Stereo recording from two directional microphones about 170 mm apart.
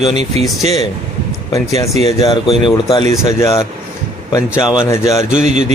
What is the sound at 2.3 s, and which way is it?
Speech, 30° left (ahead or behind).